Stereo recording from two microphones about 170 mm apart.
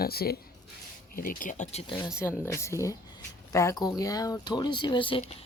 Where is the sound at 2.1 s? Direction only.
15° left (ahead or behind).